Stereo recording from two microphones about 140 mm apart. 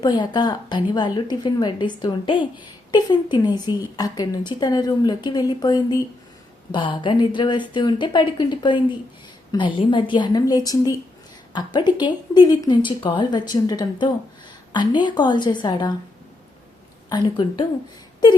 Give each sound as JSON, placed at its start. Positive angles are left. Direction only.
{"t": 0.0, "sound": "a woman's voice", "side_deg": 30}
{"t": 17.1, "sound": "a woman's voice", "side_deg": 30}